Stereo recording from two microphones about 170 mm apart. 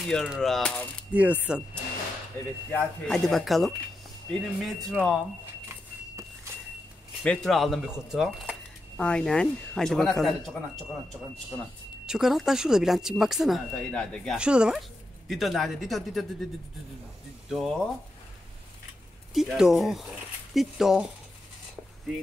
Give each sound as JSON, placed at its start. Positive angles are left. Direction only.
{"t": 0.0, "sound": "speech", "side_deg": 0}
{"t": 1.1, "sound": "speech", "side_deg": -10}
{"t": 2.7, "sound": "speech", "side_deg": 5}
{"t": 5.7, "sound": "a sound", "side_deg": -15}
{"t": 7.2, "sound": "speech", "side_deg": 0}
{"t": 12.1, "sound": "speech", "side_deg": 0}
{"t": 17.5, "sound": "speech", "side_deg": 0}
{"t": 19.3, "sound": "speech", "side_deg": 0}